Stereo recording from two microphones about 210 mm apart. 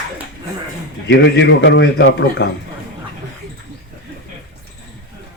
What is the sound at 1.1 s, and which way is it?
A man's voice, 60° left (ahead or behind).